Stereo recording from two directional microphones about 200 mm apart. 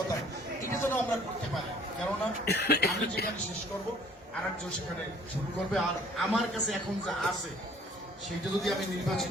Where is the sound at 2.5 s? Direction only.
55° left (ahead or behind).